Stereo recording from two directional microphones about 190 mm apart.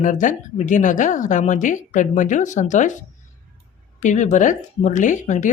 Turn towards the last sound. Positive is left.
turn(degrees=40)  # may be behind; listen again after turning